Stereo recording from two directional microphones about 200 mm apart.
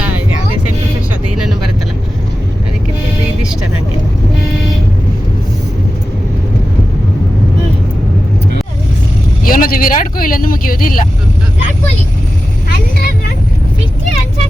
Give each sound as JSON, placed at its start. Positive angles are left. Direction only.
{"t": 9.4, "sound": "speech", "side_deg": 45}